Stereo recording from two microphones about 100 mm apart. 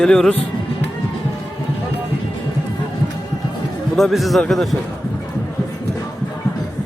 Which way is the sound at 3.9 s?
Centre (ahead or behind).